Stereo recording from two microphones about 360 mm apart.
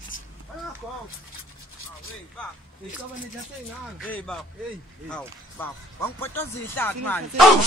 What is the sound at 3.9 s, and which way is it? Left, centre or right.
Speech, centre.